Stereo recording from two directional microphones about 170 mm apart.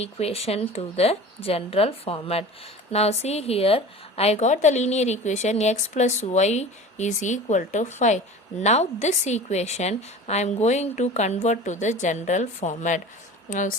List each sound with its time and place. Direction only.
0.0 s a woman's voice: 35° left (ahead or behind)